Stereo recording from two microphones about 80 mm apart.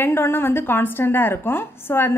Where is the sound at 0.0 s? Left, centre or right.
Left.